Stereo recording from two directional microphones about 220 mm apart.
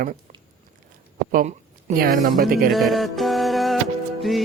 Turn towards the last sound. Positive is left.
turn(degrees=0)  # may be behind; listen again after turning